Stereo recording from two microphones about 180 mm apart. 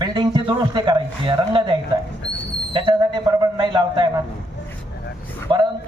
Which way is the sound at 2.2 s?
75° left (ahead or behind).